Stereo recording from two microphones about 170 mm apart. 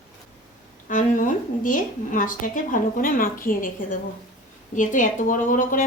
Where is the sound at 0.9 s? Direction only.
50° left (ahead or behind).